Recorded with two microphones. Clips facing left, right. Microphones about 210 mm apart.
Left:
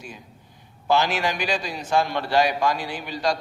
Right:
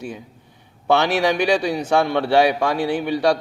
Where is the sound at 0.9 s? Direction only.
65° right (ahead or behind).